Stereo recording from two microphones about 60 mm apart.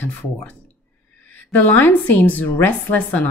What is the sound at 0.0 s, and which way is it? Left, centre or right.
A woman's voice, left.